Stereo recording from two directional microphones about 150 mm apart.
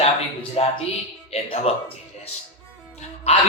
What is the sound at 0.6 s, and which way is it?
Speech, 40° left (ahead or behind).